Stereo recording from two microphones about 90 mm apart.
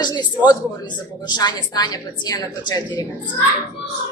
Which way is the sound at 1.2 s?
50° left (ahead or behind).